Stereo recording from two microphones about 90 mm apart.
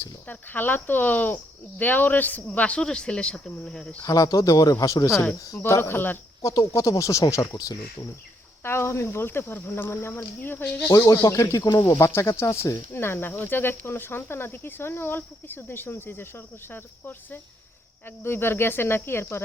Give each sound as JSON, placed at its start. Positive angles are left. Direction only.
{"t": 0.3, "sound": "a man's voice", "side_deg": 20}
{"t": 4.0, "sound": "speech", "side_deg": 40}
{"t": 6.4, "sound": "speech", "side_deg": 40}
{"t": 8.6, "sound": "speech", "side_deg": 30}
{"t": 10.9, "sound": "speech", "side_deg": 40}
{"t": 12.9, "sound": "speech", "side_deg": 25}